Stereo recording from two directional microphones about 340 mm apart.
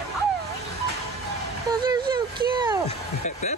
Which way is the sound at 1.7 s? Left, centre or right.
Centre.